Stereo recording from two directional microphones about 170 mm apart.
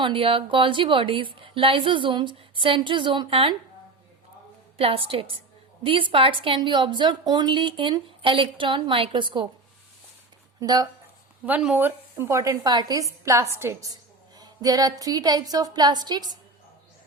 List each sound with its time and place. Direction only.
0.0 s a woman's voice: 30° right (ahead or behind)
4.8 s a woman's voice: 35° right (ahead or behind)
10.6 s speech: 20° right (ahead or behind)
11.4 s a woman's voice: 10° right (ahead or behind)